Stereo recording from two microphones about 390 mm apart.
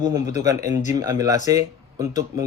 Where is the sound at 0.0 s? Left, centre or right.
Centre.